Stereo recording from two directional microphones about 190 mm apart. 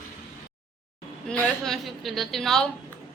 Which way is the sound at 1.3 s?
5° left (ahead or behind).